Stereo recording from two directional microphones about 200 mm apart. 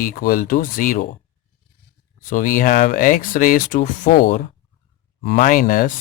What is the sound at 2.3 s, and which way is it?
Speech, 40° left (ahead or behind).